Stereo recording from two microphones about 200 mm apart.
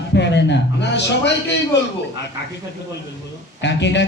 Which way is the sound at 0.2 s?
60° left (ahead or behind).